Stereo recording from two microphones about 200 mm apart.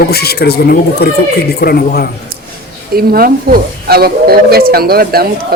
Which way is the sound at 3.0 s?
45° right (ahead or behind).